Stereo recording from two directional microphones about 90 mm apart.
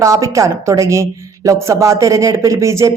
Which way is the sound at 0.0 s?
35° right (ahead or behind).